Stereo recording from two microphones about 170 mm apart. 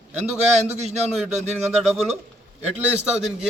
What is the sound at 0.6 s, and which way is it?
Speech, 40° right (ahead or behind).